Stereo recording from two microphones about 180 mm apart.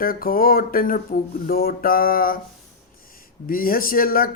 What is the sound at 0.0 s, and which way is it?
Mantra, 55° left (ahead or behind).